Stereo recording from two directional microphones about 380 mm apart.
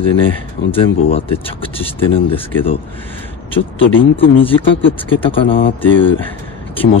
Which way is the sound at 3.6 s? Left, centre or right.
Left.